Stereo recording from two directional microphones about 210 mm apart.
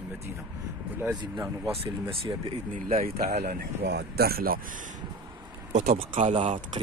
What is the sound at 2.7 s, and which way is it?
A man's voice, 40° right (ahead or behind).